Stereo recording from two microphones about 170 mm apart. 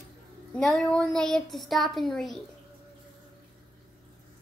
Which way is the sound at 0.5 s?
5° left (ahead or behind).